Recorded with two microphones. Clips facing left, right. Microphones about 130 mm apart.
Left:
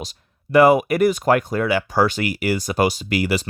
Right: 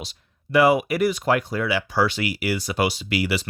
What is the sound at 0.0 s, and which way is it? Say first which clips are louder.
Speech: left 4 dB; 45° left (ahead or behind).